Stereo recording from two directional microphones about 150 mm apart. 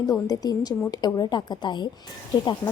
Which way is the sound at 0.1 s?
25° left (ahead or behind).